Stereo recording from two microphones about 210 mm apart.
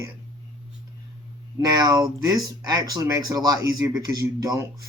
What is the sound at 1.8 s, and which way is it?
Speech, 20° right (ahead or behind).